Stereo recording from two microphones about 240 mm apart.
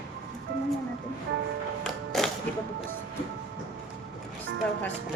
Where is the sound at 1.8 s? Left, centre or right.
Centre.